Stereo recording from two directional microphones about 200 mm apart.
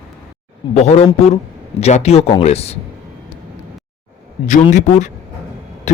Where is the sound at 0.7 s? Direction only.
35° left (ahead or behind).